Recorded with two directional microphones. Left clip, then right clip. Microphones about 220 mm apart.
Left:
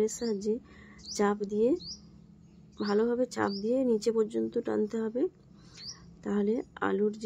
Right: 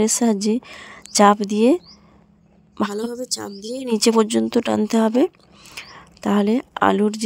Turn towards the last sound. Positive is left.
turn(degrees=-50)  # may be behind; listen again after turning